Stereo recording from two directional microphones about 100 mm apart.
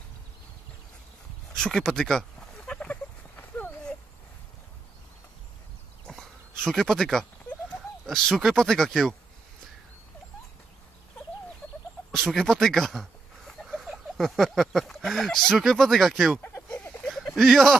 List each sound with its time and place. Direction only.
1.6 s a sound: 5° left (ahead or behind)
6.0 s a sound: 5° left (ahead or behind)
8.0 s speech: 5° left (ahead or behind)
12.1 s speech: 5° left (ahead or behind)
16.3 s chicken: 25° left (ahead or behind)
17.4 s speech: centre (ahead or behind)